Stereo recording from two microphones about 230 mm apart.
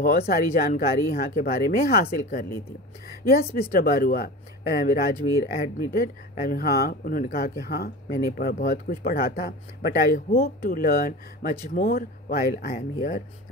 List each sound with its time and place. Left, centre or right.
0.3 s speech: left